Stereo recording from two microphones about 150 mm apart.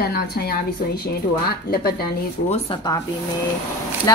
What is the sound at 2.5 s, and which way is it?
Speech, 40° left (ahead or behind).